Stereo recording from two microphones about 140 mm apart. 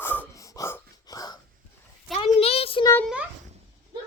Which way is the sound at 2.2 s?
45° left (ahead or behind).